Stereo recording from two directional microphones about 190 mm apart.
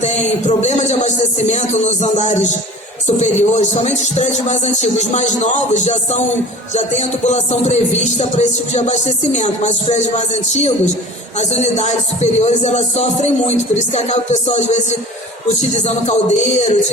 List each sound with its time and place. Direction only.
0.0 s music: 35° left (ahead or behind)